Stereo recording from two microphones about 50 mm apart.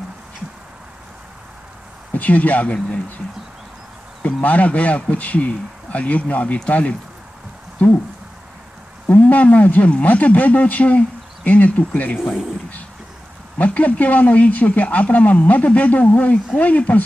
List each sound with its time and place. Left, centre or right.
2.1 s speech: left
4.4 s speech: left
9.0 s speech: left
13.7 s speech: left